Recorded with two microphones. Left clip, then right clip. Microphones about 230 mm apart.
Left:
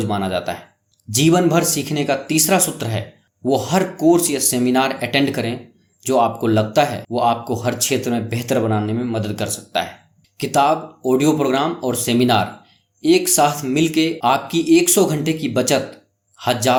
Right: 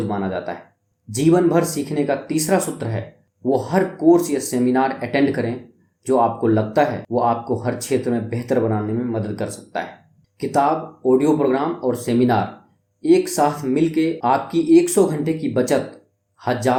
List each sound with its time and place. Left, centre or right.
0.0 s speech: left